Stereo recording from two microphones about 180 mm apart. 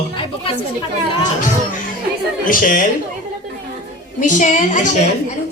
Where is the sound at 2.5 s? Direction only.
50° left (ahead or behind).